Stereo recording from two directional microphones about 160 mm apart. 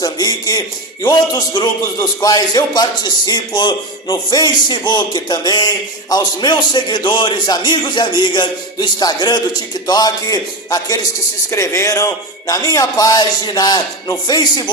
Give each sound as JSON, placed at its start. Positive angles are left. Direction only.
{"t": 0.0, "sound": "a man's voice", "side_deg": 25}